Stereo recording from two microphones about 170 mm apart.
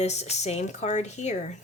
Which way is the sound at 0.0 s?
40° left (ahead or behind).